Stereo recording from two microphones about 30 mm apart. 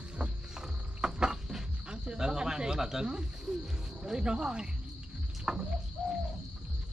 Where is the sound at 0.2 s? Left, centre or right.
Right.